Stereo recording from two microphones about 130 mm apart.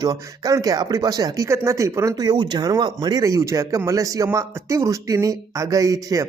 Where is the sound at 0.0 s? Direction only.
30° right (ahead or behind).